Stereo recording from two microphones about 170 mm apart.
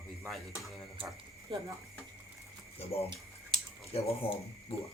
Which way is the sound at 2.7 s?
35° left (ahead or behind).